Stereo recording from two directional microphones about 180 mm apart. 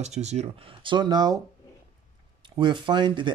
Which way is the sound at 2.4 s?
25° right (ahead or behind).